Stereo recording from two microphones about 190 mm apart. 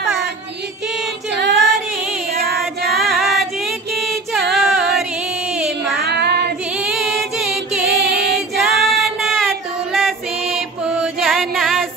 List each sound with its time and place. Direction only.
1.3 s female singing: 65° right (ahead or behind)
2.9 s music: centre (ahead or behind)
5.9 s child singing: 60° right (ahead or behind)
6.8 s chant: centre (ahead or behind)